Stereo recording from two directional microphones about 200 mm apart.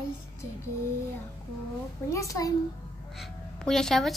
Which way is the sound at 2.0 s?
15° left (ahead or behind).